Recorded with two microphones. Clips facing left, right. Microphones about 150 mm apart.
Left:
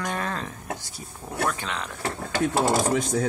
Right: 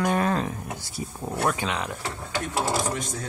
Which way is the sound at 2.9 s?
65° left (ahead or behind).